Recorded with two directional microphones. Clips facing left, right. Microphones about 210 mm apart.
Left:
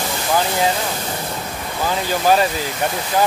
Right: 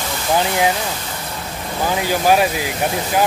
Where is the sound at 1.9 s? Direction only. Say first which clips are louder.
Right 1 dB; 15° right (ahead or behind).